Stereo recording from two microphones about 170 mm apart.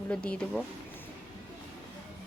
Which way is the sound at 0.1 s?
5° left (ahead or behind).